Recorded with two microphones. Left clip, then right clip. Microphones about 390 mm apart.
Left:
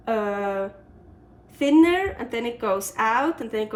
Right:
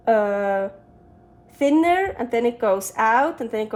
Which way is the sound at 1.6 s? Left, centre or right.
Centre.